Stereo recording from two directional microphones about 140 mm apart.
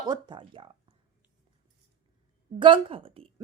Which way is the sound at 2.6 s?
40° right (ahead or behind).